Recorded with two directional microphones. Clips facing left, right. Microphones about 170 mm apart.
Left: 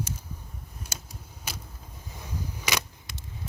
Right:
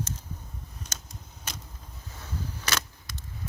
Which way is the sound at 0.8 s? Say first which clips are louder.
Left 1 dB; 10° left (ahead or behind).